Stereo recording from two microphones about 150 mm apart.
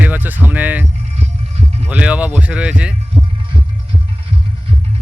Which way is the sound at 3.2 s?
30° right (ahead or behind).